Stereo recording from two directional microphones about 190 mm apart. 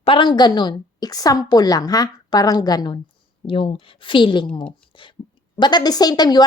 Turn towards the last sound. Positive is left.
turn(degrees=20)  # may be behind; listen again after turning